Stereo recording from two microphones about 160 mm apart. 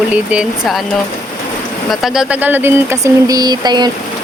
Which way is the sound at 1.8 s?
Centre (ahead or behind).